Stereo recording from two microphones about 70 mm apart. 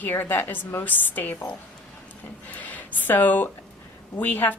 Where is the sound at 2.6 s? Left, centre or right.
Left.